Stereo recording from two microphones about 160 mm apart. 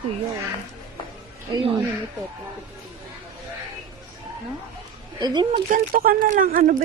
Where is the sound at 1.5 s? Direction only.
35° right (ahead or behind).